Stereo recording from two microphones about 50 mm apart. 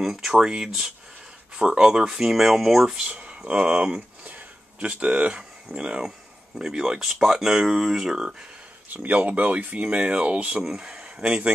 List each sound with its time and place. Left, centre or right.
0.0 s speech: centre
3.1 s speech: right
4.2 s a sound: right
5.9 s speech: centre
8.8 s speech: right; by 11.5 s centre